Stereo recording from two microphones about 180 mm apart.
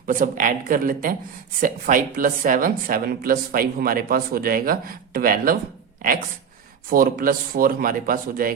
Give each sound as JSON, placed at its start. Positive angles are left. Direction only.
{"t": 0.1, "sound": "speech", "side_deg": -45}